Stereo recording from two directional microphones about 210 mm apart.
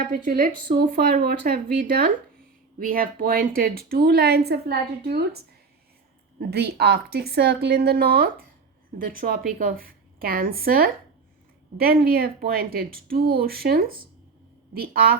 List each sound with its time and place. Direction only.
0.3 s speech: 40° right (ahead or behind)
6.5 s speech: 50° right (ahead or behind)